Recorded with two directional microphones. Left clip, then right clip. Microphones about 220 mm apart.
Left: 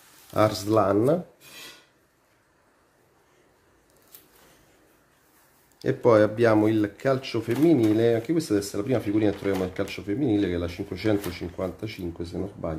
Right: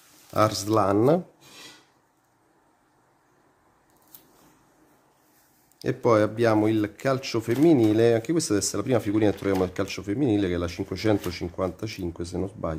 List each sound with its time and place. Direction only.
0.3 s speech: 15° right (ahead or behind)
5.8 s speech: 15° right (ahead or behind); by 12.7 s 30° right (ahead or behind)